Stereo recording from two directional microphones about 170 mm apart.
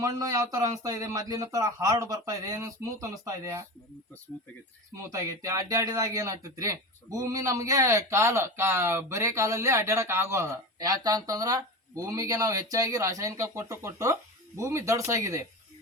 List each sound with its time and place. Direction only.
0.0 s speech: 20° right (ahead or behind)
5.0 s speech: 20° right (ahead or behind)